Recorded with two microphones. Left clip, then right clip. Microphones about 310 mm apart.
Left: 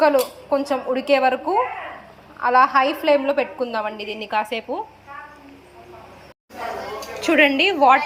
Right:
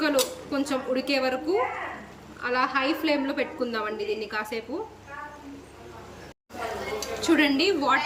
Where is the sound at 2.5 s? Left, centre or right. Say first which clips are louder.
Left 9 dB; centre.